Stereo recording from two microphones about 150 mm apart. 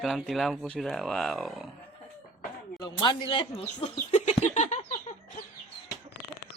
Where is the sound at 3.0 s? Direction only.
30° left (ahead or behind); by 4.9 s 50° left (ahead or behind).